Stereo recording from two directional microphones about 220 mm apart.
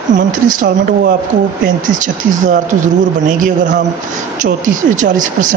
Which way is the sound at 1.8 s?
35° right (ahead or behind).